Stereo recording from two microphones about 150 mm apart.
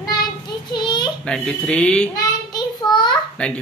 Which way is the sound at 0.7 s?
30° left (ahead or behind).